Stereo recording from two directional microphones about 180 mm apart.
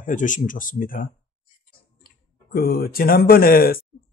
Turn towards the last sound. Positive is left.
turn(degrees=55)  # may be behind; listen again after turning